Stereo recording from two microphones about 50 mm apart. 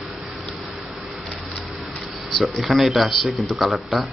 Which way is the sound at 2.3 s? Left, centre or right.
Centre.